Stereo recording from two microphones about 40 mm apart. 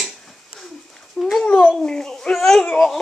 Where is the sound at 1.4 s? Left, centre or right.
Left.